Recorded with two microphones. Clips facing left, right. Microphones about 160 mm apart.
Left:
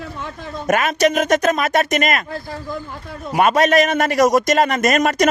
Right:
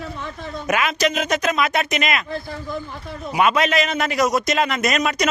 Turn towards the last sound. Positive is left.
turn(degrees=45)  # may be behind; listen again after turning